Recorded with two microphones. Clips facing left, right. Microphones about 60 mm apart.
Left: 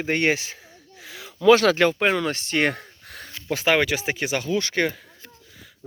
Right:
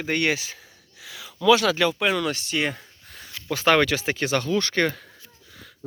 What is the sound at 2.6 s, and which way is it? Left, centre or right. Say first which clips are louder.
Gasp: left 4 dB; left.